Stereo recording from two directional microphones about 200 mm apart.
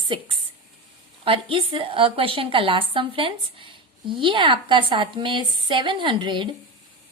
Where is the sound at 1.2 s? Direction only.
25° right (ahead or behind).